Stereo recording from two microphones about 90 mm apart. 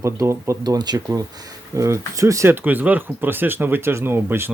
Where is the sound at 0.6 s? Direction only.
50° right (ahead or behind); by 2.6 s 35° right (ahead or behind).